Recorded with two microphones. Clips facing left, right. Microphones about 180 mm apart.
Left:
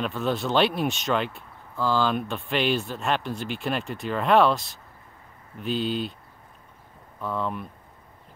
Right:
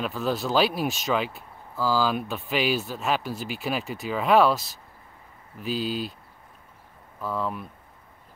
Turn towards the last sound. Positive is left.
turn(degrees=0)  # may be behind; listen again after turning